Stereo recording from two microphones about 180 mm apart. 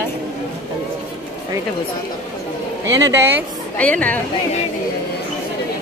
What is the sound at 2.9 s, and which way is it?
Speech, 20° right (ahead or behind).